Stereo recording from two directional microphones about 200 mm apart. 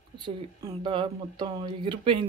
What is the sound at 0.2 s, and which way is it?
Speech, 25° right (ahead or behind).